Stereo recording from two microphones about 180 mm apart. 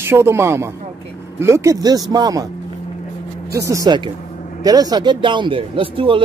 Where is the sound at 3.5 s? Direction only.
15° right (ahead or behind).